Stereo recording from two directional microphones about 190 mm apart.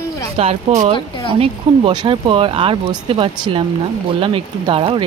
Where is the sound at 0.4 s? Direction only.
35° right (ahead or behind).